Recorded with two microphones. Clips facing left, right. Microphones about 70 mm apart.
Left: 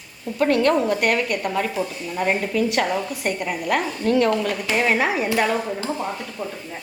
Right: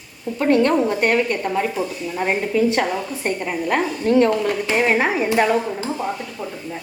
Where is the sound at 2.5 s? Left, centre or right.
Right.